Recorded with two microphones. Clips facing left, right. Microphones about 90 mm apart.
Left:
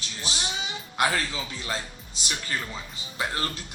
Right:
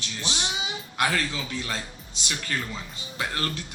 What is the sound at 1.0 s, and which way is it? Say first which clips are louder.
Speech: even; 25° left (ahead or behind).